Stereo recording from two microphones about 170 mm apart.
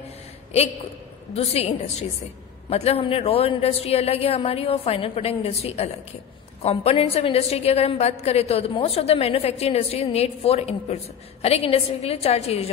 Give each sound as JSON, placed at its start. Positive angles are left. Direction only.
{"t": 1.3, "sound": "a woman's voice", "side_deg": 35}